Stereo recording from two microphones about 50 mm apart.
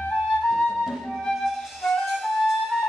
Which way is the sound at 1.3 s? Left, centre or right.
Centre.